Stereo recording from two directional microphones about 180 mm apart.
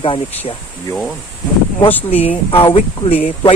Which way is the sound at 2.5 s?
30° left (ahead or behind).